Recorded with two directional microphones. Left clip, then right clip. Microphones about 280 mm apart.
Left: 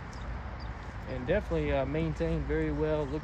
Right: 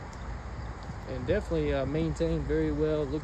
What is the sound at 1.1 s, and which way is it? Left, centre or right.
Speech, right.